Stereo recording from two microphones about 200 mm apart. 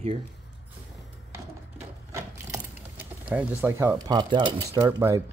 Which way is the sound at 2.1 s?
10° right (ahead or behind).